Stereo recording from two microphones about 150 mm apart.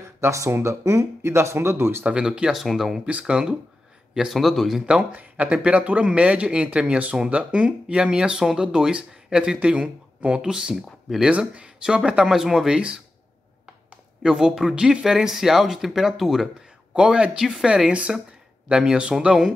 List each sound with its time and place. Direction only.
0.2 s speech: 20° right (ahead or behind)
14.2 s speech: 5° right (ahead or behind)